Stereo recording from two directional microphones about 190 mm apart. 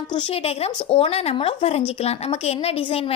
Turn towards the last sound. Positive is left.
turn(degrees=30)  # may be behind; listen again after turning